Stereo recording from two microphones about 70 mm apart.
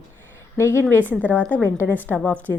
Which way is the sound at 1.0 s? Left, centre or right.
Right.